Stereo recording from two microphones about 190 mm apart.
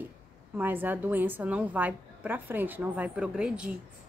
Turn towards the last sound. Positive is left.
turn(degrees=-5)  # may be behind; listen again after turning